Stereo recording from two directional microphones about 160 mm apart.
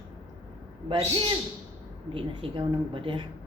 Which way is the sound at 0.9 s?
35° right (ahead or behind).